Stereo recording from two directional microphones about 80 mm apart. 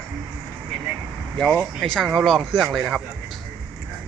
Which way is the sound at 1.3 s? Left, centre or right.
Centre.